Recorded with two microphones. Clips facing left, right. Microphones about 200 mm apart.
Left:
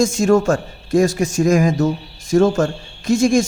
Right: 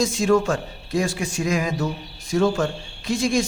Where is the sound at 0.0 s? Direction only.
45° left (ahead or behind).